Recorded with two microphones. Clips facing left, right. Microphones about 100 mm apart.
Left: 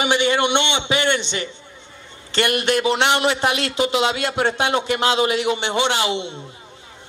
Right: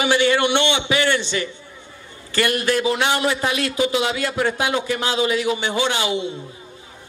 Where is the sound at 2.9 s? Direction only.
25° left (ahead or behind).